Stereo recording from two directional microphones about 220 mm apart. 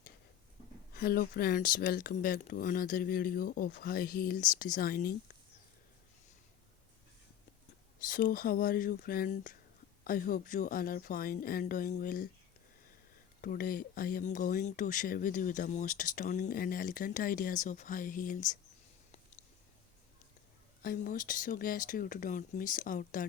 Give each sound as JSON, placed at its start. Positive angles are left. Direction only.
{"t": 0.9, "sound": "speech", "side_deg": 40}
{"t": 8.0, "sound": "speech", "side_deg": 40}
{"t": 13.4, "sound": "speech", "side_deg": 40}
{"t": 20.8, "sound": "speech", "side_deg": 40}